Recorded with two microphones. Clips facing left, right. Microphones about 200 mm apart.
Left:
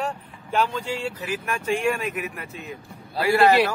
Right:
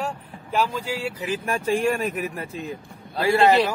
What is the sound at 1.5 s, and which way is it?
A man's voice, 35° right (ahead or behind).